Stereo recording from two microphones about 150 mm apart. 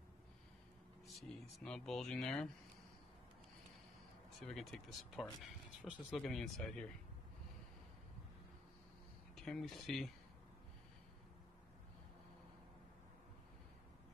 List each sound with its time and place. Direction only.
1.0 s speech: centre (ahead or behind)
4.5 s speech: 5° left (ahead or behind)
9.3 s speech: centre (ahead or behind)